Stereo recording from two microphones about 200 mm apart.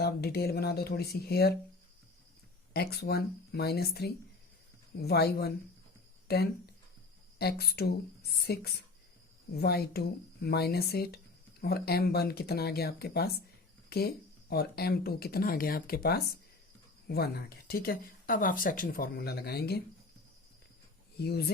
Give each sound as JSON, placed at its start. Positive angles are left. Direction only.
{"t": 0.0, "sound": "speech", "side_deg": 55}
{"t": 2.7, "sound": "speech", "side_deg": 55}
{"t": 21.2, "sound": "speech", "side_deg": 55}